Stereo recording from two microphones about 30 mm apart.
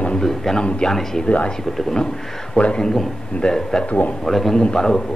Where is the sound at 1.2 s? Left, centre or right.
Left.